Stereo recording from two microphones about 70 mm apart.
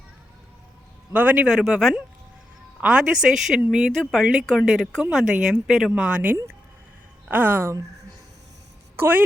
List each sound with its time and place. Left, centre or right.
1.1 s speech: right
1.5 s a woman's voice: centre
2.8 s a woman's voice: centre
7.3 s speech: right
9.0 s a woman's voice: right